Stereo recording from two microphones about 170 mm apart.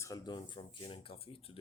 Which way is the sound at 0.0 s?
25° left (ahead or behind).